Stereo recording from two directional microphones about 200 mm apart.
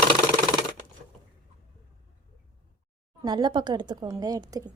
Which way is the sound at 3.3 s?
20° right (ahead or behind).